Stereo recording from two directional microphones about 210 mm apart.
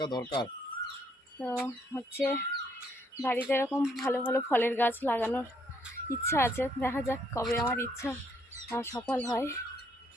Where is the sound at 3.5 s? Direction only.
10° left (ahead or behind).